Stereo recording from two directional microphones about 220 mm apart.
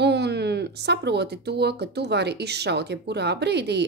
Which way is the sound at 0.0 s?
50° right (ahead or behind).